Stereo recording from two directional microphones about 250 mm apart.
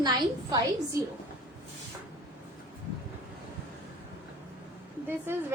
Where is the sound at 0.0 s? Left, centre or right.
Centre.